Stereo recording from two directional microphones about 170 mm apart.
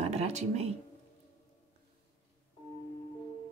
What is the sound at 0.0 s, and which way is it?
Speech, 40° right (ahead or behind).